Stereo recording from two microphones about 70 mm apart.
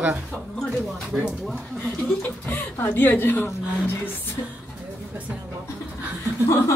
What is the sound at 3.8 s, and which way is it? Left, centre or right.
Music, left.